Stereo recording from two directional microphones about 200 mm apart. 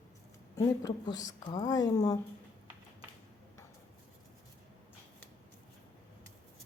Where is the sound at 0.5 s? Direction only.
20° left (ahead or behind).